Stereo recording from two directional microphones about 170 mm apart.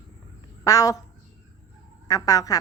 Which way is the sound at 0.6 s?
20° left (ahead or behind).